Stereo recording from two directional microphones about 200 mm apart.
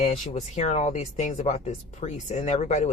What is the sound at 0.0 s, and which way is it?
Speech, 30° left (ahead or behind).